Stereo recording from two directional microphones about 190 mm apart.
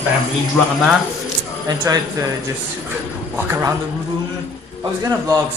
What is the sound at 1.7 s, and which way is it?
A man's voice, 20° right (ahead or behind).